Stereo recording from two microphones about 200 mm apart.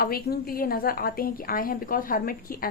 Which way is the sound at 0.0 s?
50° left (ahead or behind).